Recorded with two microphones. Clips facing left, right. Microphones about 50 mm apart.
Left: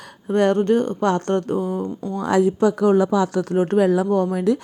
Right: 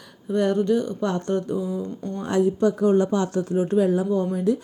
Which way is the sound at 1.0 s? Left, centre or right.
Left.